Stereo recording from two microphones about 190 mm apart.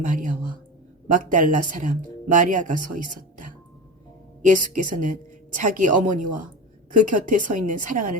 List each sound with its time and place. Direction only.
0.0 s a woman's voice: 40° right (ahead or behind)